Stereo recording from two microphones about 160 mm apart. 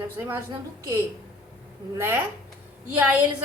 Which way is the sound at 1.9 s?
15° right (ahead or behind).